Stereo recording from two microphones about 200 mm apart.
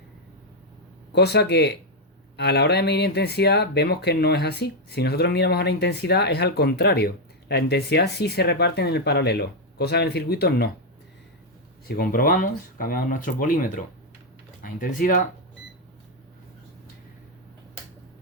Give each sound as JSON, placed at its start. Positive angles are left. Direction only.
{"t": 1.1, "sound": "speech", "side_deg": 55}
{"t": 11.9, "sound": "speech", "side_deg": 45}